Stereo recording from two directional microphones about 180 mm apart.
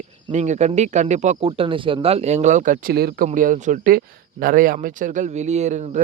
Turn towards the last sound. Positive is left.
turn(degrees=-40)  # may be behind; listen again after turning